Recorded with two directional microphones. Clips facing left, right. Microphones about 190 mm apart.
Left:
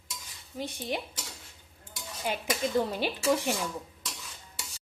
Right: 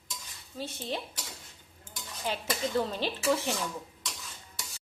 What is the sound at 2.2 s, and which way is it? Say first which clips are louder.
Speech: left 2 dB; 15° left (ahead or behind).